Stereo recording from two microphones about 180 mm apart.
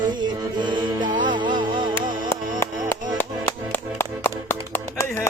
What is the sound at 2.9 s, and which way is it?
Music, 10° left (ahead or behind).